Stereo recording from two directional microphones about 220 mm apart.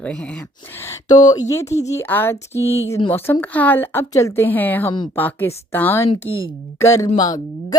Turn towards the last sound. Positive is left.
turn(degrees=15)  # may be behind; listen again after turning